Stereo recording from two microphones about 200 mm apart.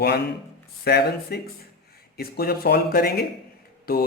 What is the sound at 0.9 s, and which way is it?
A man's voice, 55° left (ahead or behind).